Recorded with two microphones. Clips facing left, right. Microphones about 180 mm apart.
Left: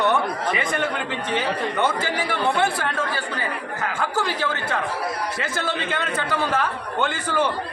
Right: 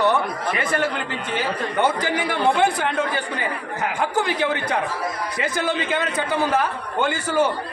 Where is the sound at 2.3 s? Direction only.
15° right (ahead or behind).